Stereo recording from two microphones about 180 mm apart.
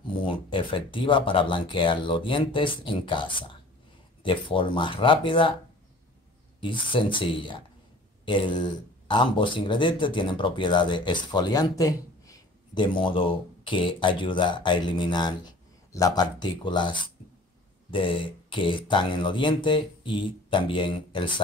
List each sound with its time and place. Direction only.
0.0 s speech: 25° left (ahead or behind)
6.6 s speech: 25° left (ahead or behind)